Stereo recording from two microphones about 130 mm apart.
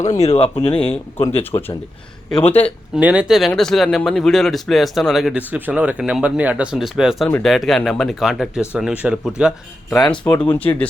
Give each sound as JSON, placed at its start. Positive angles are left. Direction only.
{"t": 0.1, "sound": "speech", "side_deg": 50}
{"t": 1.4, "sound": "speech", "side_deg": 15}
{"t": 2.9, "sound": "speech", "side_deg": -10}
{"t": 5.5, "sound": "speech", "side_deg": -15}
{"t": 10.0, "sound": "speech", "side_deg": 10}